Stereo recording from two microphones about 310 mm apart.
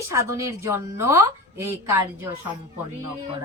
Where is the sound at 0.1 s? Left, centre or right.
Centre.